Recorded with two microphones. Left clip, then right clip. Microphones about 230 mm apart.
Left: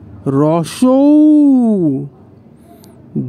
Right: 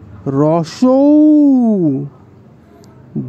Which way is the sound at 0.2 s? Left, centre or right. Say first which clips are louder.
Even; centre.